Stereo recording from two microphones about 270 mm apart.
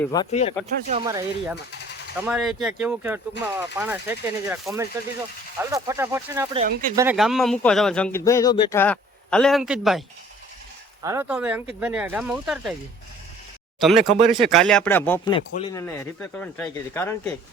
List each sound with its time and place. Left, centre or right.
0.0 s speech: centre
1.0 s speech: centre
2.2 s speech: centre
6.6 s speech: right
6.9 s speech: centre
11.0 s speech: centre
13.7 s speech: centre
15.9 s speech: centre